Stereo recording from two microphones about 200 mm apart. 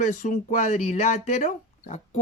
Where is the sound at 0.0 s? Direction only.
35° left (ahead or behind).